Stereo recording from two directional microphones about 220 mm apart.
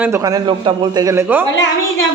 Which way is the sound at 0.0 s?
15° right (ahead or behind).